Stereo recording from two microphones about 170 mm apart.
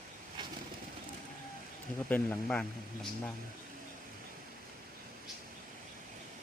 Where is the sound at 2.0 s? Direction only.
10° left (ahead or behind).